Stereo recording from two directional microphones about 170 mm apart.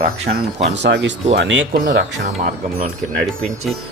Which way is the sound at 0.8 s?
90° right.